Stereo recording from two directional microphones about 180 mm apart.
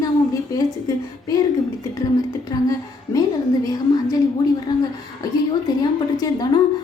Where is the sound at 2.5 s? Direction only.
20° left (ahead or behind).